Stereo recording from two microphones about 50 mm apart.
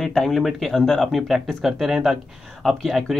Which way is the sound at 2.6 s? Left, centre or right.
Centre.